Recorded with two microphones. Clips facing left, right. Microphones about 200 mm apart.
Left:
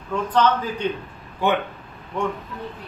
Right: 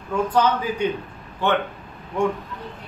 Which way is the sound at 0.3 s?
10° right (ahead or behind).